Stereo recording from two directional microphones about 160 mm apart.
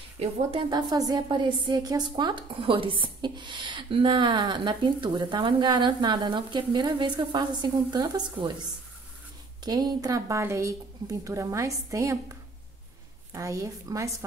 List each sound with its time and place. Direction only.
0.2 s a woman's voice: 35° right (ahead or behind)
9.7 s a woman's voice: 25° right (ahead or behind)
13.3 s a woman's voice: 20° right (ahead or behind)